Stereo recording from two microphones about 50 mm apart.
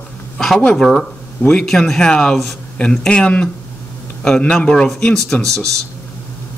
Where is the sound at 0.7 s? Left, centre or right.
Centre.